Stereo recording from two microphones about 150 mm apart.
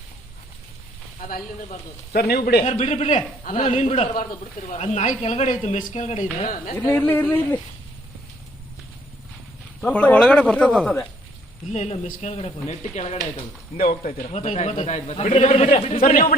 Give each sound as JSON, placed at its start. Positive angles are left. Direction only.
{"t": 2.1, "sound": "a man's voice", "side_deg": 90}
{"t": 2.6, "sound": "a man's voice", "side_deg": 50}
{"t": 6.4, "sound": "a woman's voice", "side_deg": 65}
{"t": 6.7, "sound": "speech", "side_deg": 15}
{"t": 9.8, "sound": "speech", "side_deg": 10}
{"t": 11.7, "sound": "a man's voice", "side_deg": 50}
{"t": 13.7, "sound": "speech", "side_deg": 70}
{"t": 14.3, "sound": "a man's voice", "side_deg": 50}